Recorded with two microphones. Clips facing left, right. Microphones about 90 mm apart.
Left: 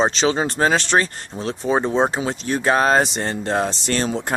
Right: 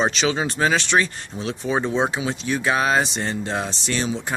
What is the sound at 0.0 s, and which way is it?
Speech, 35° left (ahead or behind).